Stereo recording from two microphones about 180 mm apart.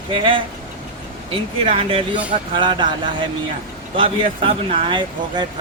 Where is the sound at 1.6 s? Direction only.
30° right (ahead or behind).